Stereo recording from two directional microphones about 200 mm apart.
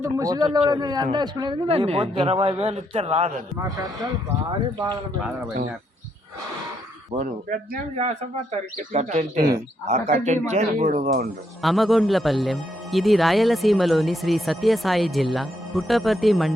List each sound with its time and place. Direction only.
0.0 s a man's voice: 15° right (ahead or behind); by 3.4 s 35° right (ahead or behind)
7.1 s speech: 40° right (ahead or behind)
11.6 s speech: centre (ahead or behind)